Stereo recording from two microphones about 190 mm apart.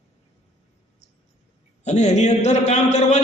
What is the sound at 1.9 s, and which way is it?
A man's voice, 35° left (ahead or behind).